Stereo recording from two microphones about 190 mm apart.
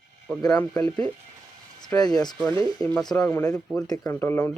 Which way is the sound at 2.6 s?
5° left (ahead or behind).